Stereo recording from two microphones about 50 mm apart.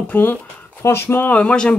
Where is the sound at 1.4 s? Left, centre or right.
Left.